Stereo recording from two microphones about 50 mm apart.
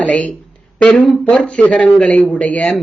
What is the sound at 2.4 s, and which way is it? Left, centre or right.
Speech, left.